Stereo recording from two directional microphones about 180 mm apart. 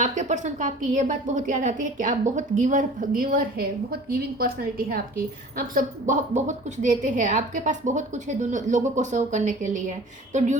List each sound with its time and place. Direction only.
0.0 s a woman's voice: 40° right (ahead or behind)